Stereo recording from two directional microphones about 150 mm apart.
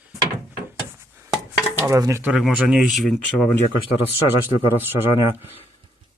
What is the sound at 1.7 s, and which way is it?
Dishes, 15° right (ahead or behind).